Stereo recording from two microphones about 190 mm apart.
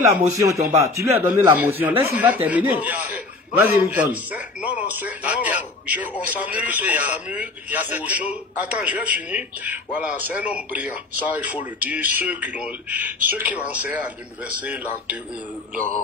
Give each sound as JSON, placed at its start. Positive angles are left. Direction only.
{"t": 0.3, "sound": "a man's voice", "side_deg": -15}